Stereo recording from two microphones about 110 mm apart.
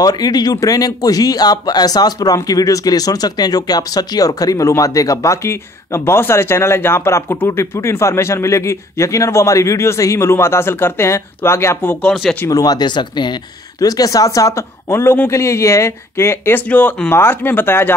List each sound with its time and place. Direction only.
0.0 s speech: 35° left (ahead or behind); by 12.1 s 15° left (ahead or behind)
12.1 s speech: 5° left (ahead or behind)
12.4 s speech: 35° left (ahead or behind); by 17.9 s 20° left (ahead or behind)